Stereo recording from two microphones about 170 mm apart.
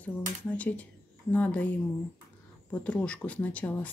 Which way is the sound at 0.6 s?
10° left (ahead or behind).